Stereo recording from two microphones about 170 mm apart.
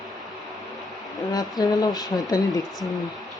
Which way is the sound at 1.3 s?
20° left (ahead or behind).